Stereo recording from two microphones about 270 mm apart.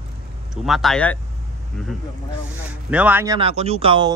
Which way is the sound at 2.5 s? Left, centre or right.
Centre.